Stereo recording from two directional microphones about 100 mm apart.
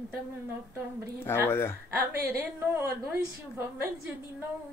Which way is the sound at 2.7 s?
25° right (ahead or behind).